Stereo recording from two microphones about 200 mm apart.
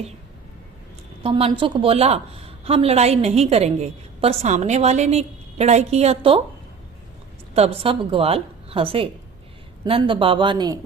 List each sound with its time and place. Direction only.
1.2 s a woman's voice: 25° right (ahead or behind)
7.5 s a woman's voice: 30° right (ahead or behind)